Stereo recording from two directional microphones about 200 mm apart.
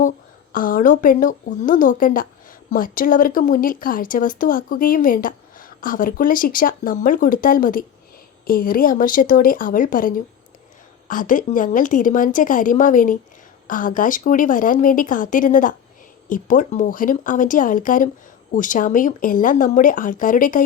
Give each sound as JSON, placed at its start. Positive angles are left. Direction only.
{"t": 0.5, "sound": "speech", "side_deg": 45}